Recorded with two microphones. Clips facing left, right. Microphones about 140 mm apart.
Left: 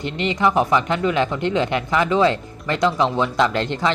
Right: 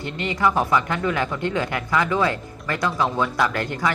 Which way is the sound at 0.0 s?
20° left (ahead or behind).